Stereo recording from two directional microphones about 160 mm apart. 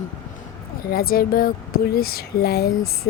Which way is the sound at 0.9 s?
65° left (ahead or behind).